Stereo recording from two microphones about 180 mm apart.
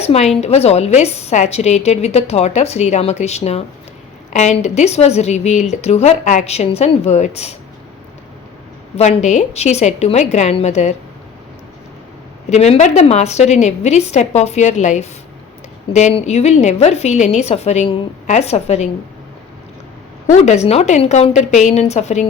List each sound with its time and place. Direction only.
0.0 s a woman's voice: 35° left (ahead or behind)
9.0 s a woman's voice: 40° left (ahead or behind)
12.5 s a woman's voice: 35° left (ahead or behind)
20.2 s a woman's voice: 40° left (ahead or behind)